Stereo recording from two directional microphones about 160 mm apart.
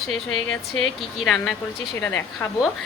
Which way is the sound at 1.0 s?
Centre (ahead or behind).